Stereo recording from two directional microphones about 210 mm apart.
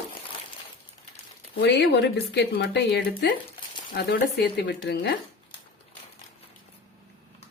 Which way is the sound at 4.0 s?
50° left (ahead or behind).